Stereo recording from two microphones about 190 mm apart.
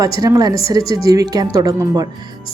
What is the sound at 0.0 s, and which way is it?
Speech, 20° right (ahead or behind).